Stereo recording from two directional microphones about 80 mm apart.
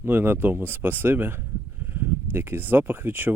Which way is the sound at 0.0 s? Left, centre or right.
Right.